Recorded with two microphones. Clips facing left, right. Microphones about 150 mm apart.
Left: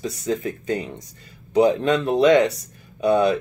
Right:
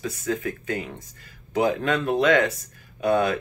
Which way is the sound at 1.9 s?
35° left (ahead or behind).